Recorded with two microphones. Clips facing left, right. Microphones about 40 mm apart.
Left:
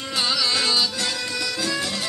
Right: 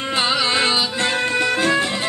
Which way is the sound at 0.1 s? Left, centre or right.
Right.